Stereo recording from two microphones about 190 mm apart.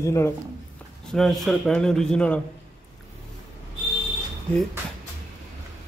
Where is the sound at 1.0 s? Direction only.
Centre (ahead or behind).